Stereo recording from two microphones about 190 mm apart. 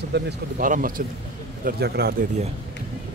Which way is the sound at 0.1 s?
45° right (ahead or behind).